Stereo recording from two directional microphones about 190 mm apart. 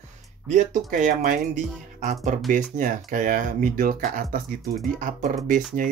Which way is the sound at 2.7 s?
40° right (ahead or behind).